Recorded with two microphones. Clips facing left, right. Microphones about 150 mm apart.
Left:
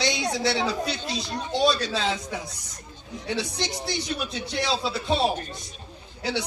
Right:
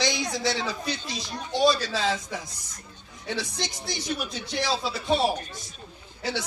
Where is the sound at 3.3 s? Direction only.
60° left (ahead or behind).